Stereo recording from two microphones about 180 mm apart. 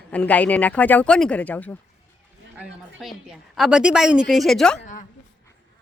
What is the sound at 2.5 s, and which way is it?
A woman's voice, 5° right (ahead or behind).